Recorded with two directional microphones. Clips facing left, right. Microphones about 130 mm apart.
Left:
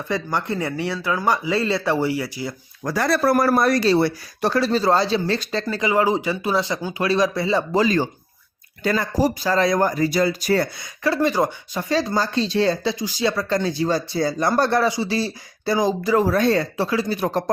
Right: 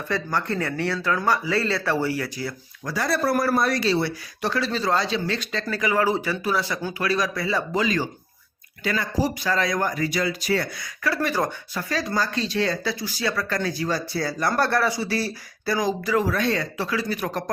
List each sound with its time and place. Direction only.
0.1 s speech: 15° left (ahead or behind)
2.8 s speech: 55° left (ahead or behind); by 5.6 s 35° left (ahead or behind)
5.6 s speech: 20° left (ahead or behind); by 10.7 s 40° left (ahead or behind)
11.0 s speech: 25° left (ahead or behind)